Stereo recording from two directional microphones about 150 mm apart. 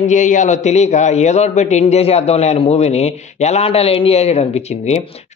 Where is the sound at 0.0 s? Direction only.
55° left (ahead or behind).